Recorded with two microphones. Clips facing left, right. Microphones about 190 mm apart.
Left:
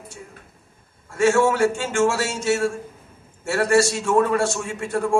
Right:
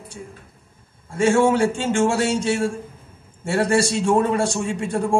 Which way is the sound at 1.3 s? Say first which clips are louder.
Right 4 dB; 20° right (ahead or behind).